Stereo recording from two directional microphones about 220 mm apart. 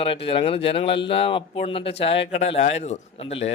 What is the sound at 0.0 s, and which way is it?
Speech, 25° left (ahead or behind).